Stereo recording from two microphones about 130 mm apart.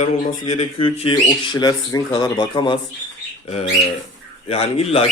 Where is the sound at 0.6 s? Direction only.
50° left (ahead or behind); by 2.8 s 35° left (ahead or behind).